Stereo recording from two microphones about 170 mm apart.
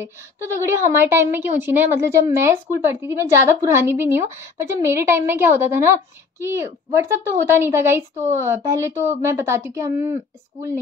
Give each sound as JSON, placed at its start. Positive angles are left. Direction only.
{"t": 0.0, "sound": "a woman's voice", "side_deg": -15}